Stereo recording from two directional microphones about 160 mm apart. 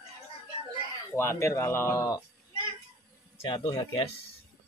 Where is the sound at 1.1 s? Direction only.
15° left (ahead or behind).